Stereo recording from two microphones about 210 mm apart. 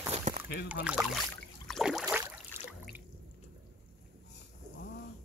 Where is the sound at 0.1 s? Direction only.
35° right (ahead or behind).